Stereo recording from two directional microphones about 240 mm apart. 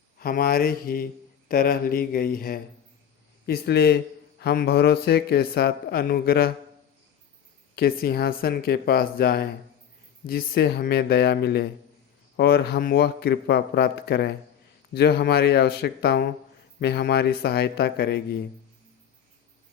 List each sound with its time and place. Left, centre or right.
0.2 s a man's voice: left
7.8 s a man's voice: left